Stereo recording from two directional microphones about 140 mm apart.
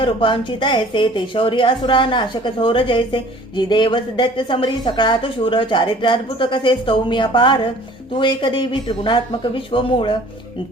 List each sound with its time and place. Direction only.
0.0 s a woman's voice: 35° left (ahead or behind)